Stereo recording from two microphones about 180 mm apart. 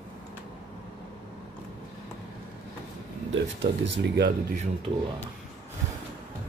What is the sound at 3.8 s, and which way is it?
Speech, 75° right (ahead or behind).